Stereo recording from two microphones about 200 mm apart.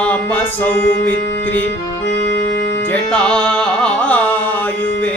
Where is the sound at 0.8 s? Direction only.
45° left (ahead or behind).